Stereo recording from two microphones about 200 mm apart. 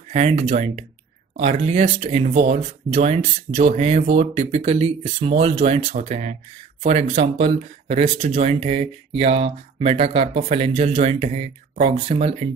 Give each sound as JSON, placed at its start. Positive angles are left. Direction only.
{"t": 0.1, "sound": "speech", "side_deg": -30}